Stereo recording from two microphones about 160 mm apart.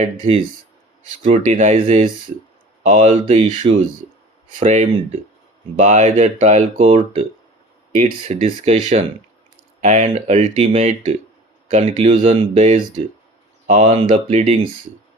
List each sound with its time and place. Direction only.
0.0 s speech: 35° right (ahead or behind)
1.5 s speech: 55° right (ahead or behind)
1.7 s speech: 35° right (ahead or behind)